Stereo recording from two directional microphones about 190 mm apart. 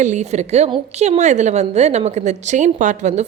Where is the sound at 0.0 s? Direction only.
40° right (ahead or behind).